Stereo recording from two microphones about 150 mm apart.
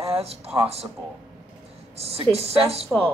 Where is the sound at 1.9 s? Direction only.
40° right (ahead or behind).